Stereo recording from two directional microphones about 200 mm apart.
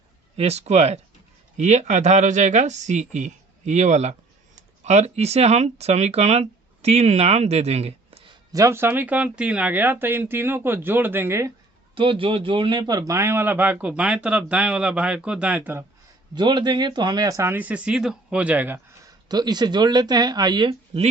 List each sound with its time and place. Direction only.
0.3 s speech: 30° right (ahead or behind)
8.5 s a man's voice: 15° right (ahead or behind)
11.9 s a man's voice: 25° right (ahead or behind); by 15.8 s 10° right (ahead or behind)
16.3 s speech: 20° right (ahead or behind)